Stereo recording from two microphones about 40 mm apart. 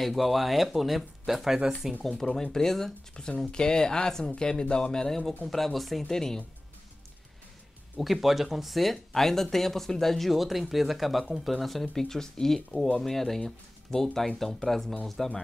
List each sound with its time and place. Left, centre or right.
0.0 s speech: centre
2.0 s speech: centre
6.0 s speech: centre
8.0 s speech: centre